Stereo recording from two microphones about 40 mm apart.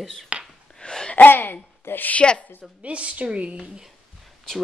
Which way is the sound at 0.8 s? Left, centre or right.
Centre.